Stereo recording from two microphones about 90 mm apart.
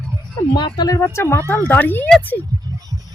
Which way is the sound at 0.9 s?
30° left (ahead or behind).